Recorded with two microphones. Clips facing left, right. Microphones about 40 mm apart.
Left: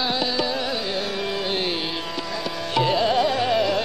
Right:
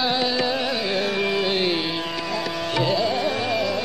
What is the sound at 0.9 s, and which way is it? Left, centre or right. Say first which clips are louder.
Carnatic music: right 4 dB; centre.